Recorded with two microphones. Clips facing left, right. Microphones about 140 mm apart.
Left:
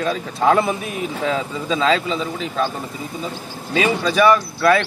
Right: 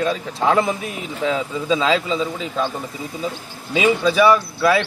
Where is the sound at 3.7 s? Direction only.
10° right (ahead or behind).